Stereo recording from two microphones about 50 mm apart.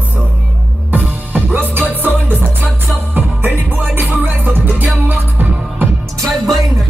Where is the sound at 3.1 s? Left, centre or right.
Right.